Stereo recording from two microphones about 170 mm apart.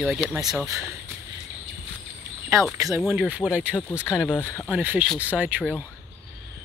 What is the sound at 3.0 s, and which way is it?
Speech, 5° right (ahead or behind).